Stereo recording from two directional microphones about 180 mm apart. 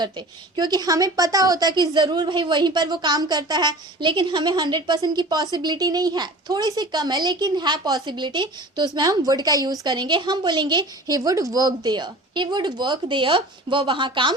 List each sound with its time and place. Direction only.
0.5 s a woman's voice: 20° right (ahead or behind)